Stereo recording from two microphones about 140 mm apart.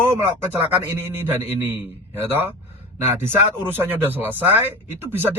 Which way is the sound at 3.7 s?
15° right (ahead or behind).